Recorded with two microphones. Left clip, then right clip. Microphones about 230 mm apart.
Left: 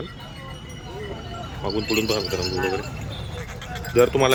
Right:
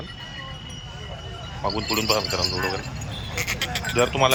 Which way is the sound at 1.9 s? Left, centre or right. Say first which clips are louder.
Even; centre.